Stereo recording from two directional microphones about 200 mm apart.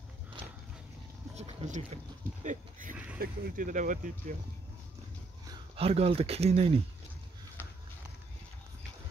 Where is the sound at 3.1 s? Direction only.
45° right (ahead or behind).